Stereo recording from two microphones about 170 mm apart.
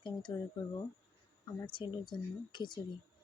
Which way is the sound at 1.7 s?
30° left (ahead or behind).